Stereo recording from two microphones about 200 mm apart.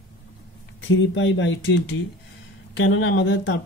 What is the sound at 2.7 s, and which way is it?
Speech, 80° left.